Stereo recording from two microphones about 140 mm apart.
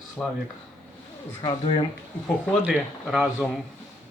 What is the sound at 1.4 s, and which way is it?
Speech, 40° left (ahead or behind).